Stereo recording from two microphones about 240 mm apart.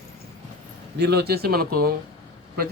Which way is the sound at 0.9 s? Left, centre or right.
Right.